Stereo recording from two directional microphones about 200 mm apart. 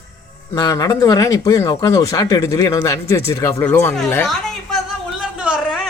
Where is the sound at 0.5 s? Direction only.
20° left (ahead or behind).